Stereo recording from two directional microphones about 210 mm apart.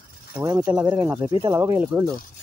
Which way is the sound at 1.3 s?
20° right (ahead or behind).